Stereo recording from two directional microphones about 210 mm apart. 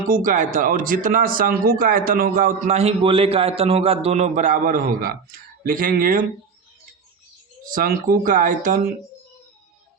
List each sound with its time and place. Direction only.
0.1 s speech: 40° right (ahead or behind)
7.7 s speech: 40° right (ahead or behind)